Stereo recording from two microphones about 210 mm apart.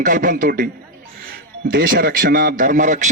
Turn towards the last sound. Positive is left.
turn(degrees=-35)  # may be behind; listen again after turning